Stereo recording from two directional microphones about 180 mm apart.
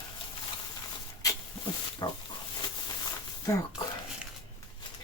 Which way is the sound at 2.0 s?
20° left (ahead or behind).